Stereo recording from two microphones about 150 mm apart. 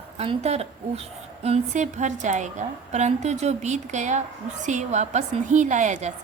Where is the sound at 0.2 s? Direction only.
45° right (ahead or behind).